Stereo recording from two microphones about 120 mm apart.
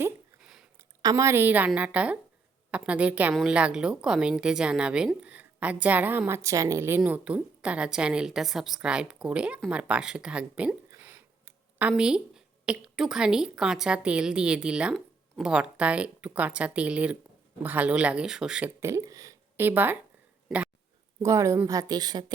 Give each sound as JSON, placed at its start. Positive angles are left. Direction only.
{"t": 0.3, "sound": "a sound", "side_deg": -5}
{"t": 0.8, "sound": "speech", "side_deg": -25}
{"t": 7.0, "sound": "speech", "side_deg": -10}
{"t": 18.8, "sound": "speech", "side_deg": -25}
{"t": 21.2, "sound": "speech", "side_deg": -25}